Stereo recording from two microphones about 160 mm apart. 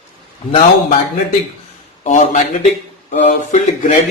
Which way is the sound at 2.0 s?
50° left (ahead or behind).